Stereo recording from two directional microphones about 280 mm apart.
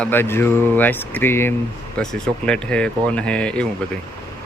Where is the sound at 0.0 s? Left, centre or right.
Centre.